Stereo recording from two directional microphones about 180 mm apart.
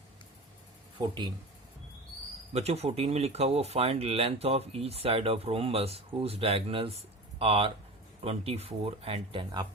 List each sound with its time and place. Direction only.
0.9 s speech: 25° right (ahead or behind)
2.5 s speech: 35° right (ahead or behind)